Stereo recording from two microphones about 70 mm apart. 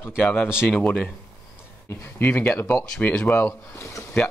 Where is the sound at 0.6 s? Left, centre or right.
Left.